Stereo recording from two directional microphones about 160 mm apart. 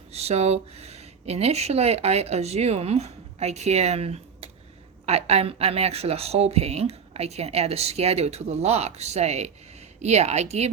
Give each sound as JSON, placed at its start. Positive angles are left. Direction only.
{"t": 0.1, "sound": "speech", "side_deg": -40}